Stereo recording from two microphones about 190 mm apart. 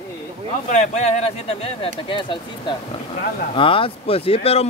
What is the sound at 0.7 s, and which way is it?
Speech, 40° left (ahead or behind).